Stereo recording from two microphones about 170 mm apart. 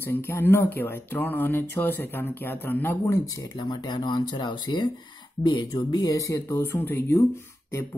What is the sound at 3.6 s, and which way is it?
Speech, 25° left (ahead or behind).